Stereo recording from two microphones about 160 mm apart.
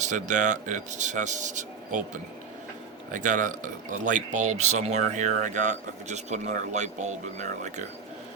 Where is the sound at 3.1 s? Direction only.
50° right (ahead or behind).